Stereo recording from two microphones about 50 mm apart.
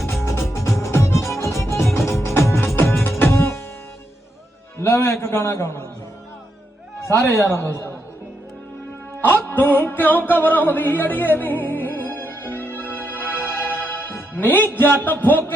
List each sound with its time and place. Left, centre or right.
0.1 s music: left
1.6 s music: left
3.2 s music: left
4.8 s a man's voice: left
7.3 s a man's voice: left
9.5 s music: left